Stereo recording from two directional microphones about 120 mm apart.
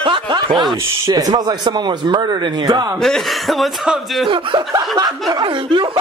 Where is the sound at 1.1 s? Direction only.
30° right (ahead or behind).